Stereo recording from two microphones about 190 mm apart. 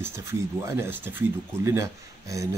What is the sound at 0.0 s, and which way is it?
Speech, 15° right (ahead or behind).